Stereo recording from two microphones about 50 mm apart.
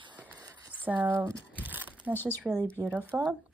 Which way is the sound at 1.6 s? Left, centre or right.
Right.